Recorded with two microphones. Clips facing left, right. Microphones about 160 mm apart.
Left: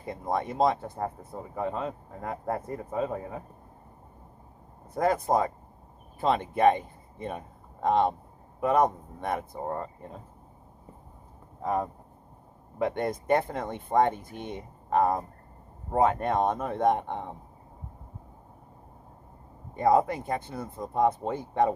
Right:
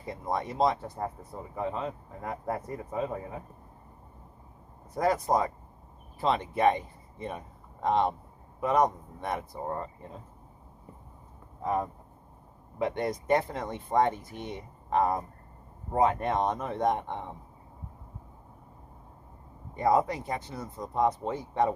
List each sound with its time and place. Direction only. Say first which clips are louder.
0.0 s speech: left 2 dB; 55° left (ahead or behind)
4.9 s a man's voice: left 1 dB; 55° left (ahead or behind)
11.6 s speech: left 1 dB; 45° left (ahead or behind)
19.7 s speech: left 2 dB; 50° left (ahead or behind)